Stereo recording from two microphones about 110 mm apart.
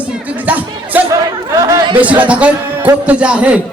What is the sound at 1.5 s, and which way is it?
Chatter, 30° right (ahead or behind).